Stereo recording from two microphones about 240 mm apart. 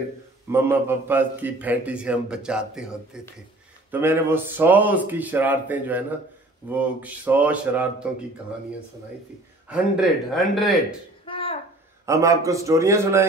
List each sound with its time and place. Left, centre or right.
0.5 s a man's voice: centre
9.7 s a man's voice: centre
11.2 s a sound: left
12.1 s speech: centre